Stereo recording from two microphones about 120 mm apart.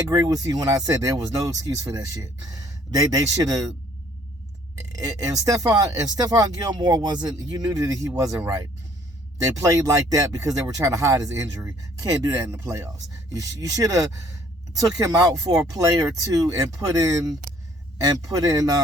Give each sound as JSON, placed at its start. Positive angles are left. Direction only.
{"t": 0.1, "sound": "speech", "side_deg": -30}
{"t": 4.9, "sound": "speech", "side_deg": -30}
{"t": 9.4, "sound": "speech", "side_deg": -25}